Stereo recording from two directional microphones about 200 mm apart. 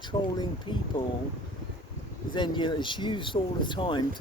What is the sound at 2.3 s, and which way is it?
Speech, 20° left (ahead or behind).